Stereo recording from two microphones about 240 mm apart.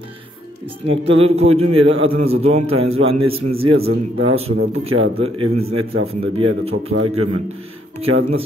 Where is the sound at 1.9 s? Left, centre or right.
Right.